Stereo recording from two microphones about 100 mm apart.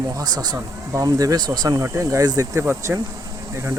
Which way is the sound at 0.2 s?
40° right (ahead or behind).